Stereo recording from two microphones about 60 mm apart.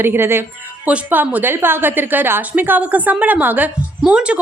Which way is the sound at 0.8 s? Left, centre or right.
Right.